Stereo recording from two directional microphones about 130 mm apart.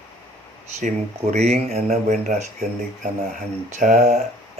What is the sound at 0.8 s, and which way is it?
Speech, 60° right (ahead or behind).